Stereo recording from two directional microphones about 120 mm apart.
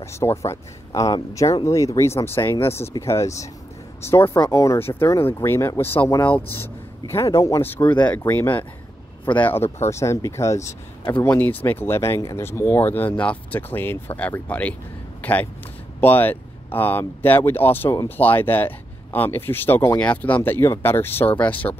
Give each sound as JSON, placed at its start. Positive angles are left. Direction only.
{"t": 0.0, "sound": "speech", "side_deg": 25}
{"t": 7.6, "sound": "speech", "side_deg": 15}